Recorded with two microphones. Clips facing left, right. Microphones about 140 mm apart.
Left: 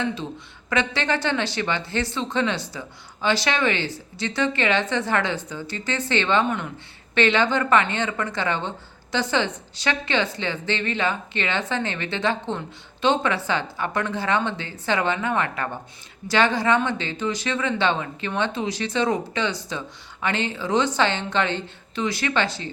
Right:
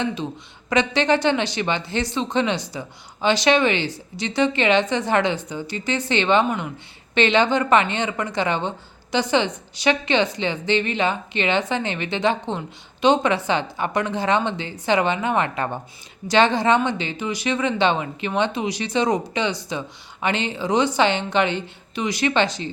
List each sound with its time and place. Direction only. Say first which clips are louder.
0.0 s a woman's voice: right 2 dB; 15° right (ahead or behind)